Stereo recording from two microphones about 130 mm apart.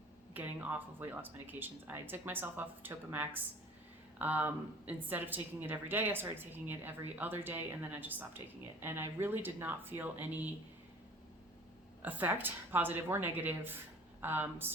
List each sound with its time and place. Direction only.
0.3 s a woman's voice: 15° right (ahead or behind)
12.0 s a woman's voice: 15° right (ahead or behind)